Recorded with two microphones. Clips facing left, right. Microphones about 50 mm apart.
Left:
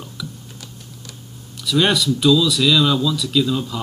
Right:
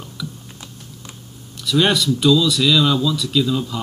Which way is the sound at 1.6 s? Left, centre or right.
Centre.